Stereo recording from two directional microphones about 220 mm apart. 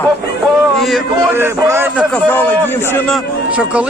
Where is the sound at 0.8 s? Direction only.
Centre (ahead or behind).